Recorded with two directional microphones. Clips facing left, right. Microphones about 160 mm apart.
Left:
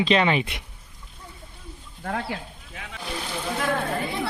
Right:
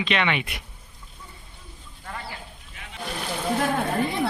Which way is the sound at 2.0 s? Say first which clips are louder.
Left 8 dB; 65° left (ahead or behind).